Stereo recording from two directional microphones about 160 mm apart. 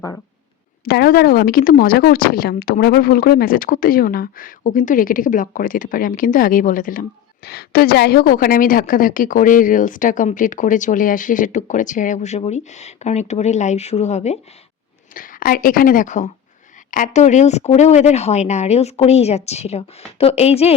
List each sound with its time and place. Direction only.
0.9 s speech: 70° left (ahead or behind)
7.4 s speech: 75° left (ahead or behind); by 14.3 s 45° left (ahead or behind)
15.1 s speech: 60° left (ahead or behind); by 20.7 s 40° left (ahead or behind)